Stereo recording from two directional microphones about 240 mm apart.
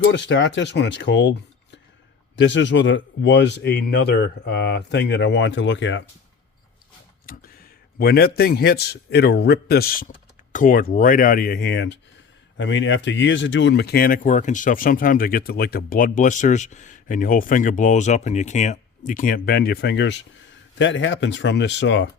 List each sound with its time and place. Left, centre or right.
0.1 s speech: left
7.9 s speech: left